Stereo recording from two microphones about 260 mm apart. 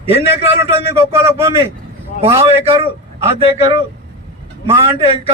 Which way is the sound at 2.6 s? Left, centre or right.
Right.